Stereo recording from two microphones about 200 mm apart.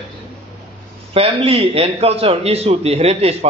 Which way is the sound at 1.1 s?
30° right (ahead or behind).